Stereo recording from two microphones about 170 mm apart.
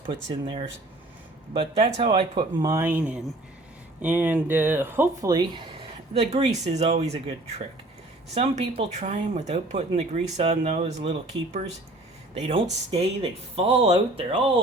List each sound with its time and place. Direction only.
0.0 s speech: 30° right (ahead or behind)
2.0 s speech: 30° right (ahead or behind); by 5.3 s 15° right (ahead or behind)
5.3 s speech: 25° right (ahead or behind)
6.1 s speech: 40° right (ahead or behind)